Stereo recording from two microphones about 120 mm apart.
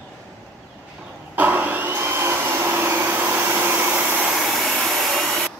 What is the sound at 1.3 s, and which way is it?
Vacuum cleaner, 15° right (ahead or behind).